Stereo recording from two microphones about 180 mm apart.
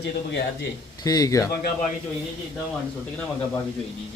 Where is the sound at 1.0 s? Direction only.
20° left (ahead or behind).